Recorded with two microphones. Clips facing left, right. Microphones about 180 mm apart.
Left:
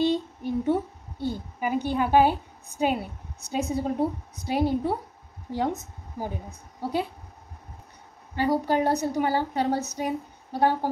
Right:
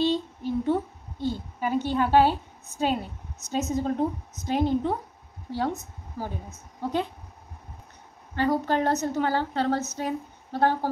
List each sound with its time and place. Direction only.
0.0 s a sound: 15° left (ahead or behind)
2.8 s a woman's voice: 10° left (ahead or behind)
8.4 s a woman's voice: 10° left (ahead or behind)